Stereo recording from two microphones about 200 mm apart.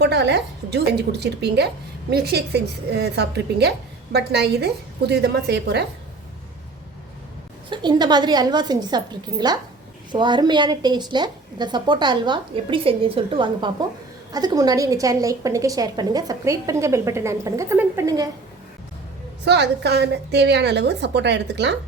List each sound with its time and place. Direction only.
0.0 s a woman's voice: 55° right (ahead or behind)
7.7 s a woman's voice: 20° right (ahead or behind)
19.5 s a woman's voice: 60° right (ahead or behind)